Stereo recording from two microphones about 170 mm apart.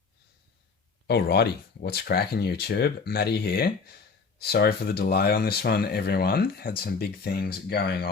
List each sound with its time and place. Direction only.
1.0 s speech: 75° left (ahead or behind)